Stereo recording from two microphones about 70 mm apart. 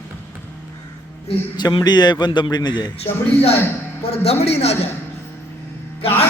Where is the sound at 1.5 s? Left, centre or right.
Left.